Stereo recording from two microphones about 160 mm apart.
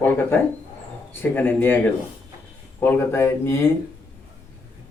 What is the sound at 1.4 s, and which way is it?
Speech, 10° left (ahead or behind).